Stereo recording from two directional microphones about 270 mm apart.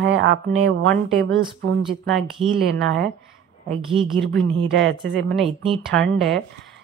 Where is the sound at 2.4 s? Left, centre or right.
Right.